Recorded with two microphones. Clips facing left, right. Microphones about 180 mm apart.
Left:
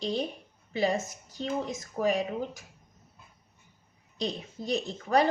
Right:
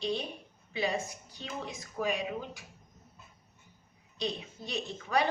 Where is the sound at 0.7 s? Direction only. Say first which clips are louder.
Left 5 dB; 45° left (ahead or behind).